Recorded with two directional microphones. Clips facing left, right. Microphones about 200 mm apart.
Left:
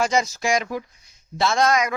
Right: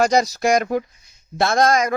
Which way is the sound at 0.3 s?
60° right (ahead or behind).